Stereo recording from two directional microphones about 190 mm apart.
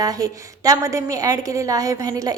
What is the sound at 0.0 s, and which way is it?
A woman's voice, 20° right (ahead or behind).